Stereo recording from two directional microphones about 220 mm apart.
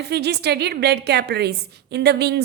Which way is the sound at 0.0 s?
50° right (ahead or behind).